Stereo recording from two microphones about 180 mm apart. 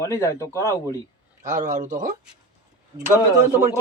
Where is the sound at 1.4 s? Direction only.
45° right (ahead or behind).